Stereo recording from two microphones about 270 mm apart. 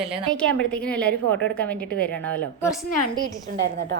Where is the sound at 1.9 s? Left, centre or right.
Left.